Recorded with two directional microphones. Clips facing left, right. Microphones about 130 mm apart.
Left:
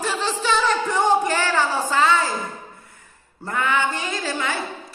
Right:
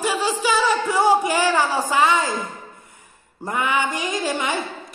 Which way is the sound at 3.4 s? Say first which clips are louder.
Even; 15° right (ahead or behind).